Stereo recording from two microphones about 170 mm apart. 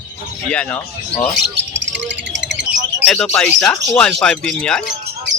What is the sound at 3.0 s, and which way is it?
Speech, 5° left (ahead or behind).